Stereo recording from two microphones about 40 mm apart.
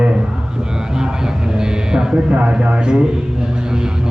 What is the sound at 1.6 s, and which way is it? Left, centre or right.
A man's voice, centre.